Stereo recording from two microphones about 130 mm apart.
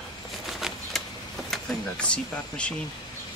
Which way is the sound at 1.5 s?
10° left (ahead or behind).